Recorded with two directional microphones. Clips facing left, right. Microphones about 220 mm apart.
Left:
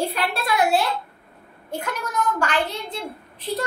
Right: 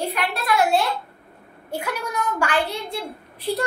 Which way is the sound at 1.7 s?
10° right (ahead or behind).